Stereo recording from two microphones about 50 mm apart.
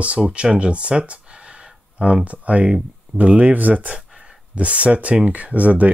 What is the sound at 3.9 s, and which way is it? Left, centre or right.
Speech, centre.